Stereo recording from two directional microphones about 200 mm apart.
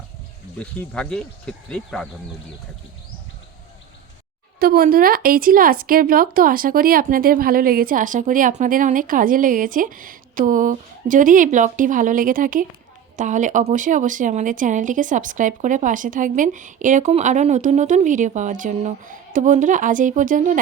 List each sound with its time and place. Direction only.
0.6 s speech: 5° left (ahead or behind)
4.6 s speech: 45° right (ahead or behind)